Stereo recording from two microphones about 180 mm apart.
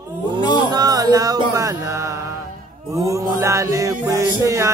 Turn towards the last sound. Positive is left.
turn(degrees=-15)  # may be behind; listen again after turning